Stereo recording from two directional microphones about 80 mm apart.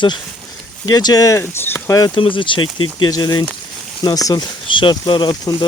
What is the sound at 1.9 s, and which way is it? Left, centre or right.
Speech, left.